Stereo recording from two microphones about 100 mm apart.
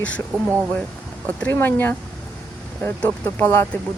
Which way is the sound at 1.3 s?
15° left (ahead or behind).